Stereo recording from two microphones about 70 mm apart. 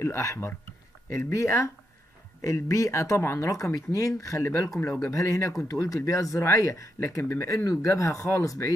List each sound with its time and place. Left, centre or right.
0.0 s speech: left